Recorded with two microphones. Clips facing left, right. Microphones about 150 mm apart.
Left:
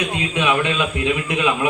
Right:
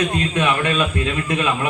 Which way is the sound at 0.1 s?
15° left (ahead or behind).